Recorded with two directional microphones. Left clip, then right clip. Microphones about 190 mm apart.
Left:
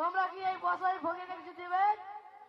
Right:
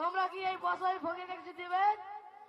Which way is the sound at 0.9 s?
40° right (ahead or behind).